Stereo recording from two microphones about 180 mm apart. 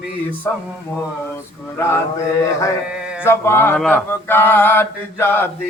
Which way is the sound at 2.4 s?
15° left (ahead or behind).